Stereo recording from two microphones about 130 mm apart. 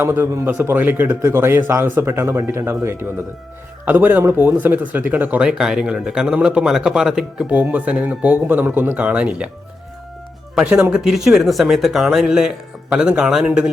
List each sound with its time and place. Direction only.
0.0 s a man's voice: 20° right (ahead or behind)
10.5 s speech: 5° right (ahead or behind)